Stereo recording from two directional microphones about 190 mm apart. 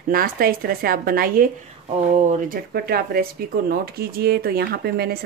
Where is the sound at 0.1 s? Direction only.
50° right (ahead or behind).